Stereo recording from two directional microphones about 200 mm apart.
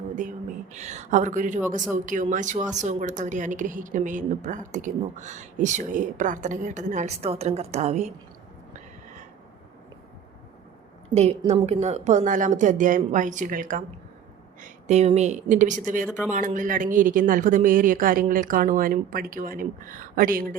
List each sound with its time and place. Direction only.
0.2 s speech: 40° right (ahead or behind)
11.1 s speech: 30° right (ahead or behind)